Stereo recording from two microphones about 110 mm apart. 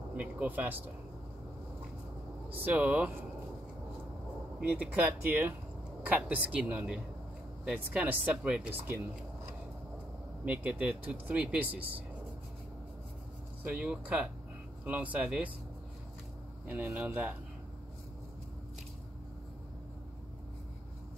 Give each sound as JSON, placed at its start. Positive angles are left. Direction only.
{"t": 0.1, "sound": "speech", "side_deg": -15}
{"t": 2.5, "sound": "speech", "side_deg": -15}
{"t": 4.6, "sound": "speech", "side_deg": -15}
{"t": 8.7, "sound": "speech", "side_deg": -20}
{"t": 10.4, "sound": "speech", "side_deg": -15}
{"t": 13.7, "sound": "speech", "side_deg": -10}
{"t": 16.6, "sound": "speech", "side_deg": -15}